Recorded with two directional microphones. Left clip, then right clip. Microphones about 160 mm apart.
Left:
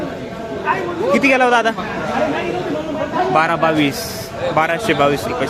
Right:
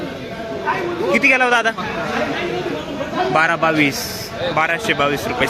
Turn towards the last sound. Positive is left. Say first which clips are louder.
# left 2 dB
turn(degrees=5)  # may be behind; listen again after turning